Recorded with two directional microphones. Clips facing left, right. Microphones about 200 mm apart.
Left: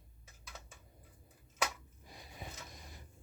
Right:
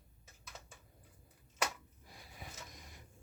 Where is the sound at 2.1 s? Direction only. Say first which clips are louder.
Left 3 dB; 20° left (ahead or behind).